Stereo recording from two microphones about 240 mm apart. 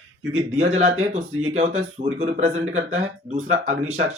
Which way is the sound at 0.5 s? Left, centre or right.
Right.